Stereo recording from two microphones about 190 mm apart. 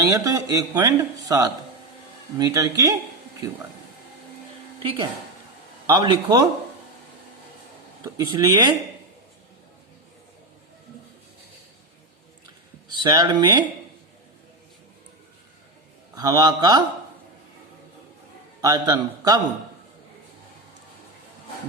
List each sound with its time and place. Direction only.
0.0 s speech: 15° right (ahead or behind)
4.8 s a man's voice: 30° right (ahead or behind)
8.0 s a man's voice: 20° right (ahead or behind)
12.9 s speech: 25° right (ahead or behind)
16.1 s a man's voice: 20° right (ahead or behind)
18.6 s a man's voice: 20° right (ahead or behind)